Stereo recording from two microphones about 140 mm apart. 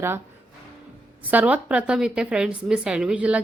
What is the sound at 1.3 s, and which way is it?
A woman's voice, 10° right (ahead or behind).